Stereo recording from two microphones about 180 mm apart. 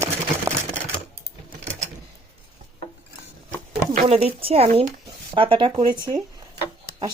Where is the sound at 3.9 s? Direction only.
35° right (ahead or behind).